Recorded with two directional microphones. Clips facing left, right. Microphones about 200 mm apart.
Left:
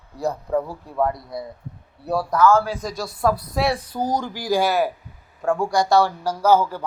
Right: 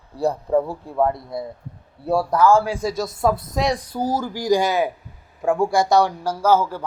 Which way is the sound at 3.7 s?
10° right (ahead or behind).